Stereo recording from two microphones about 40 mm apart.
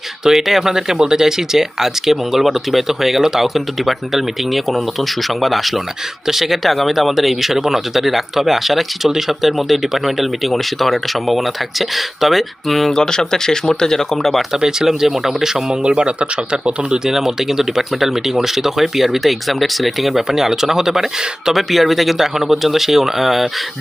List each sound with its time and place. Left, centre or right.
0.3 s speech: centre
12.9 s speech: centre
14.5 s speech: centre
15.8 s speech: right
17.1 s speech: centre
20.2 s speech: centre